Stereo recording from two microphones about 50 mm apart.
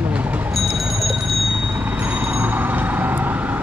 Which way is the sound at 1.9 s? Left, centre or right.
Right.